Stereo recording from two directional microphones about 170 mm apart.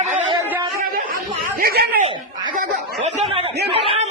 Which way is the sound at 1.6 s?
60° right (ahead or behind).